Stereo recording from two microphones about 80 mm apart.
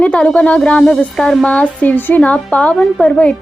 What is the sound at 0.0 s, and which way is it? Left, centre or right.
A woman's voice, centre.